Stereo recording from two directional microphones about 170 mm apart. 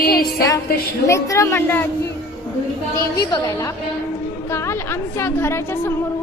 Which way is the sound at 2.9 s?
20° left (ahead or behind).